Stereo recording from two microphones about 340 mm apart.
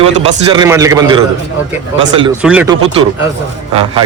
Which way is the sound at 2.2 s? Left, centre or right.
Centre.